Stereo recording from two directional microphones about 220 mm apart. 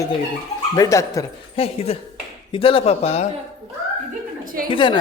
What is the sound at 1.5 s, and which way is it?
Speech, 25° left (ahead or behind).